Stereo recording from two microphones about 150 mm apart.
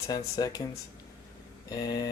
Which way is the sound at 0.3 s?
25° left (ahead or behind).